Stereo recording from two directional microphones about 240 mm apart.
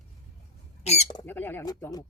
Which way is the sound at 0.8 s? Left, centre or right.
Left.